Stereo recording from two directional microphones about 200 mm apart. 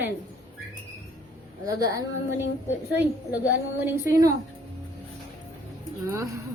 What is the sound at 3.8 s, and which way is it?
Speech, 10° right (ahead or behind).